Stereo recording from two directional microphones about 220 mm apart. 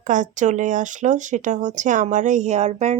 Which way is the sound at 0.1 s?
35° right (ahead or behind).